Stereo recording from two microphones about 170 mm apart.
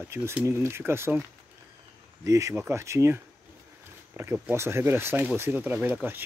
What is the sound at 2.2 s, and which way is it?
Speech, 20° right (ahead or behind).